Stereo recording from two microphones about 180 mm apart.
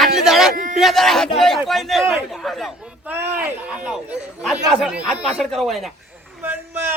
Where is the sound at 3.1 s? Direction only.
10° right (ahead or behind).